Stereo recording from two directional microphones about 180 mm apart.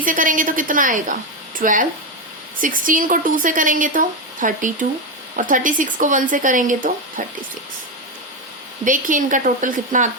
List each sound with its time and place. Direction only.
0.0 s speech: 45° right (ahead or behind)
8.8 s speech: 45° right (ahead or behind)